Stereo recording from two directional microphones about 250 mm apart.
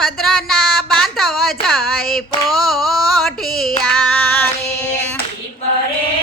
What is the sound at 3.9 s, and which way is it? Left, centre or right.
Female singing, centre.